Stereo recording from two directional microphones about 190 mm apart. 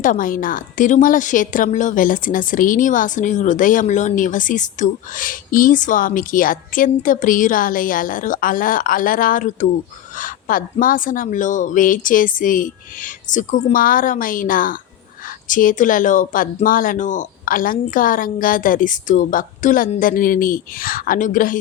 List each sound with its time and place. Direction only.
0.0 s speech: 45° left (ahead or behind)